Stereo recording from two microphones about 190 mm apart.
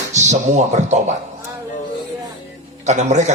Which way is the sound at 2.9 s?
35° right (ahead or behind).